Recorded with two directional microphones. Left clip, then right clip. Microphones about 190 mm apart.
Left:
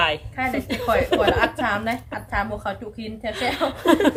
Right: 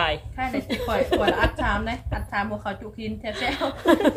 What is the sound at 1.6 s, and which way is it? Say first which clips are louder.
A woman's voice: left 3 dB; 50° left (ahead or behind).